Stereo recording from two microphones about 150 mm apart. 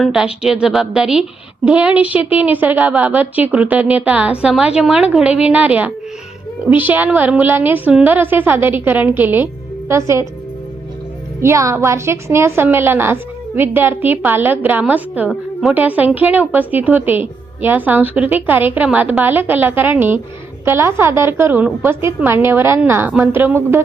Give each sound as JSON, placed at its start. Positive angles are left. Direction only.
{"t": 0.0, "sound": "a woman's voice", "side_deg": 0}
{"t": 11.3, "sound": "a woman's voice", "side_deg": -20}